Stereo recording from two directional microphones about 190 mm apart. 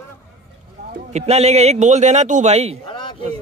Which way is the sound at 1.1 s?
35° right (ahead or behind).